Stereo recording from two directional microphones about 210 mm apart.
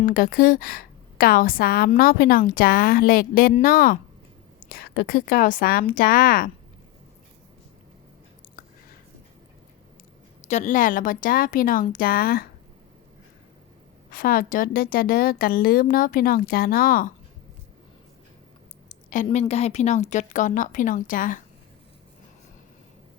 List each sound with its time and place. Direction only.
0.0 s a woman's voice: 45° left (ahead or behind)
10.5 s a woman's voice: 35° left (ahead or behind)
14.1 s a woman's voice: 45° left (ahead or behind)
18.9 s a woman's voice: 35° left (ahead or behind)